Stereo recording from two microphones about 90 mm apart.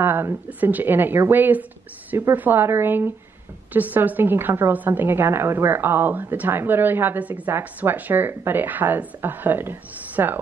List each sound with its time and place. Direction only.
0.0 s a woman's voice: 25° right (ahead or behind)